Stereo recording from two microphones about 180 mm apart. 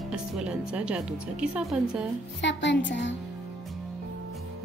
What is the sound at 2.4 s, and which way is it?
Speech, 80° left.